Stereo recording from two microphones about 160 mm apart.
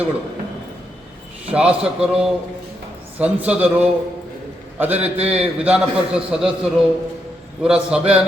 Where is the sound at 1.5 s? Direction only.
5° right (ahead or behind).